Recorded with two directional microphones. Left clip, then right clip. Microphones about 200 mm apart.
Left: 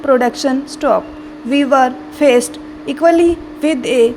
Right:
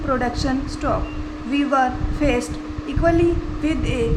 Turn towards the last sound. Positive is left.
turn(degrees=35)  # may be behind; listen again after turning